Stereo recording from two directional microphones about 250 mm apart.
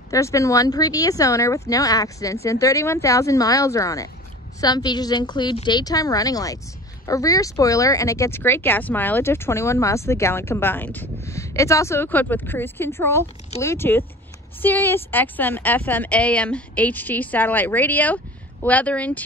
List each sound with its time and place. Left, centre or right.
0.1 s speech: centre